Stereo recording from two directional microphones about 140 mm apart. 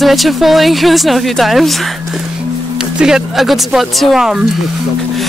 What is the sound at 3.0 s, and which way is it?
Speech, 5° right (ahead or behind).